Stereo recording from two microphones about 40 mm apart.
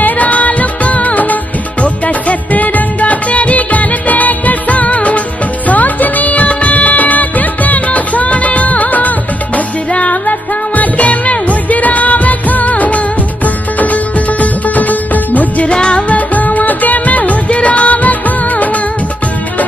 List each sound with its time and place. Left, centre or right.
0.0 s music: left
5.7 s music of bollywood: left
9.9 s music: left
14.4 s music of bollywood: left
15.6 s music: left
16.1 s music: left
17.3 s music of bollywood: left